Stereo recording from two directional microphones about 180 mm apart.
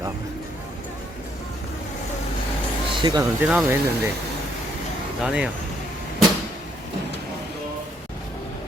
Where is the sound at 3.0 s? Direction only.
20° right (ahead or behind).